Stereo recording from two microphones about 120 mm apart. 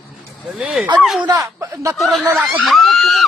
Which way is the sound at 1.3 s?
25° right (ahead or behind).